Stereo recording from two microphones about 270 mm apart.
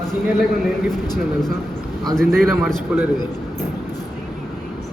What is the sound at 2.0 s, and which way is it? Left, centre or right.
Speech, centre.